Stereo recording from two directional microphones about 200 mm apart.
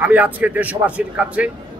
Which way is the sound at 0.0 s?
5° right (ahead or behind).